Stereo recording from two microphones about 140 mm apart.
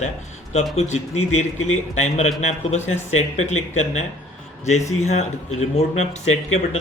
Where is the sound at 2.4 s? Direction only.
50° left (ahead or behind).